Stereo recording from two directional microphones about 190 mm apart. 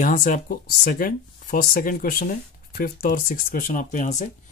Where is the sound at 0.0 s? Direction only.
45° left (ahead or behind).